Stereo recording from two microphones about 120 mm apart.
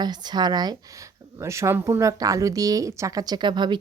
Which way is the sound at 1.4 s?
25° right (ahead or behind).